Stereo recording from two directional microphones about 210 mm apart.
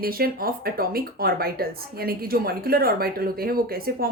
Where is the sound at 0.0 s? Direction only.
45° right (ahead or behind).